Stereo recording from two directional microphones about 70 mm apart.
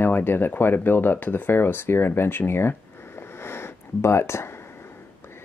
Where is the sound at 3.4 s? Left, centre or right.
Left.